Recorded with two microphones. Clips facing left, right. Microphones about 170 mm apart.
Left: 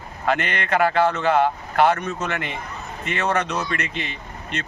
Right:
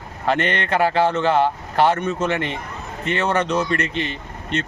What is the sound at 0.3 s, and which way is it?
A man's voice, 30° right (ahead or behind).